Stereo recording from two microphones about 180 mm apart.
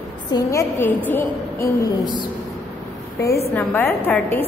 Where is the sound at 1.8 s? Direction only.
25° left (ahead or behind).